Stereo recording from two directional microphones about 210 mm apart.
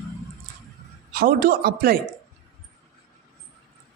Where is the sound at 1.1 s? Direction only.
40° right (ahead or behind).